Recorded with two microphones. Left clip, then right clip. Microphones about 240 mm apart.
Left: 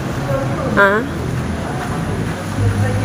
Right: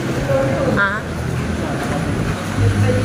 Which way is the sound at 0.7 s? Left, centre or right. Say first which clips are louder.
Left 9 dB; left.